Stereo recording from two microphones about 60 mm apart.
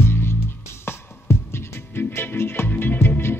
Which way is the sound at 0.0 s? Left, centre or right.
Left.